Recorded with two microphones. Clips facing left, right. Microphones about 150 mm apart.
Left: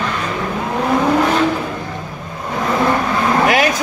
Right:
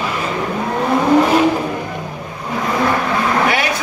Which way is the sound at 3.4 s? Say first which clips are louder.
Left 3 dB; 45° left (ahead or behind).